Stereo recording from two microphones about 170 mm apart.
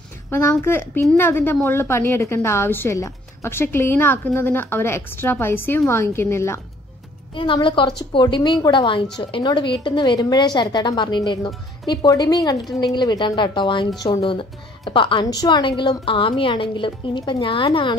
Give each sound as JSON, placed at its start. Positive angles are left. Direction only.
{"t": 0.3, "sound": "a woman's voice", "side_deg": 15}
{"t": 7.3, "sound": "a woman's voice", "side_deg": 30}